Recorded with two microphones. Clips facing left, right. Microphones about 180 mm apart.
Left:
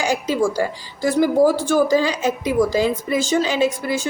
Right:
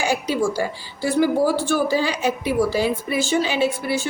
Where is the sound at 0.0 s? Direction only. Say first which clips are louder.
Left 2 dB; 45° left (ahead or behind).